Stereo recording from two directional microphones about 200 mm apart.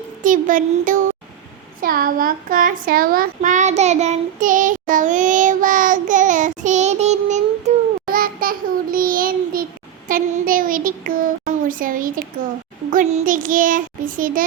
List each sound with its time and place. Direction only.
0.2 s speech: 40° right (ahead or behind)
1.8 s child singing: 45° right (ahead or behind)
11.7 s a child's voice: 45° right (ahead or behind)